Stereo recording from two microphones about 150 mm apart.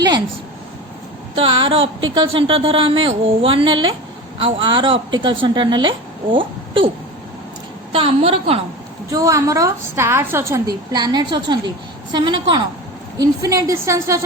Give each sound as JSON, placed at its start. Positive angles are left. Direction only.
{"t": 1.4, "sound": "a woman's voice", "side_deg": -40}
{"t": 7.9, "sound": "a woman's voice", "side_deg": -40}
{"t": 9.1, "sound": "a woman's voice", "side_deg": -20}
{"t": 10.9, "sound": "a woman's voice", "side_deg": -30}